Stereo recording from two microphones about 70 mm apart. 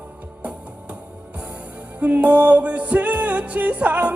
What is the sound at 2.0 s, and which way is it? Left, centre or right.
Music, right.